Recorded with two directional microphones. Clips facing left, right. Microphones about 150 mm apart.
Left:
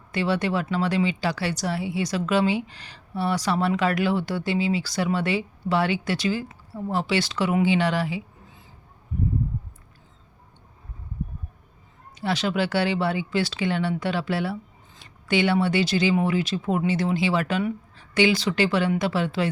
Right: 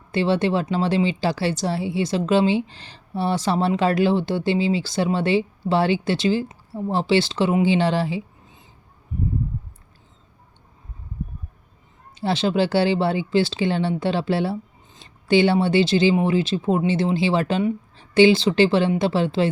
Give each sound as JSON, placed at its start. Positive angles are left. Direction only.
{"t": 0.1, "sound": "speech", "side_deg": -30}
{"t": 12.1, "sound": "speech", "side_deg": -25}